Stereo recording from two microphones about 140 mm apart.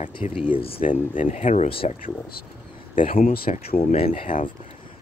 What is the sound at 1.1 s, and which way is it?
Speech, 60° left (ahead or behind).